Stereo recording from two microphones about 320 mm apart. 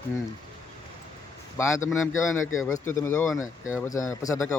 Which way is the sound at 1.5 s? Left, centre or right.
Centre.